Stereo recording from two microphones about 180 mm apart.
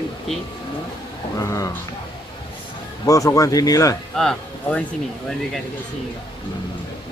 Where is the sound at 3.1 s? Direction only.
20° left (ahead or behind).